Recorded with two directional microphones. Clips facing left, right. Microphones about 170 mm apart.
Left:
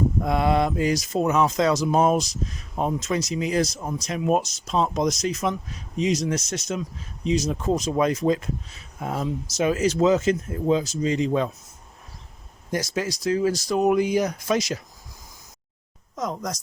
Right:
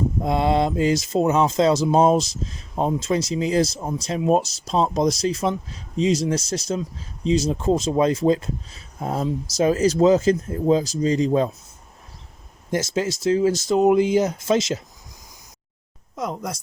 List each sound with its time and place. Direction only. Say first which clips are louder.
0.2 s speech: right 3 dB; 25° right (ahead or behind)
12.7 s speech: right 3 dB; 25° right (ahead or behind)
16.1 s speech: right 1 dB; 5° right (ahead or behind)